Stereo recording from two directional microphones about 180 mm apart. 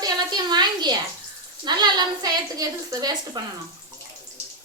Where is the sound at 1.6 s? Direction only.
25° right (ahead or behind).